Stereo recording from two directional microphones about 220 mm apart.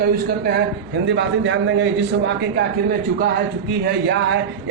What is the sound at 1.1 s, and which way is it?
A man's voice, 55° right (ahead or behind).